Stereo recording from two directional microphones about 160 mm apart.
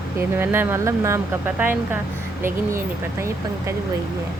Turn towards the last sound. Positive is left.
turn(degrees=-15)  # may be behind; listen again after turning